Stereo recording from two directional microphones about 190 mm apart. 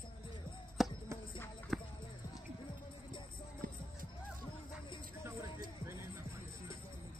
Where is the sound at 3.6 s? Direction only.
45° right (ahead or behind).